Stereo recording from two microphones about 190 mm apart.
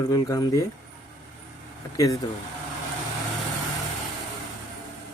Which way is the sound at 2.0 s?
15° left (ahead or behind).